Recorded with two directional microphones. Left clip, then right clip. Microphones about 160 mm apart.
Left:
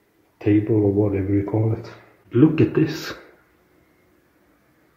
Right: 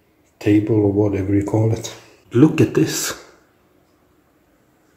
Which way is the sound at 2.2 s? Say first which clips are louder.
Right 2 dB; 15° right (ahead or behind).